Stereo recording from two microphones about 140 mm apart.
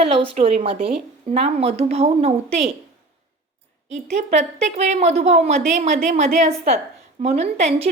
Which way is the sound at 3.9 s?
55° right (ahead or behind).